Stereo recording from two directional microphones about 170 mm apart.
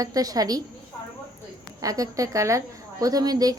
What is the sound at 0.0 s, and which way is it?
Speech, 20° right (ahead or behind).